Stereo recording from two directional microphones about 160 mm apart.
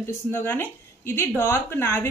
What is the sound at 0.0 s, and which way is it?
Speech, 15° left (ahead or behind).